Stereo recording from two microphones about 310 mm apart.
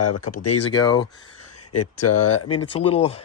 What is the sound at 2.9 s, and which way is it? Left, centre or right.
Speech, centre.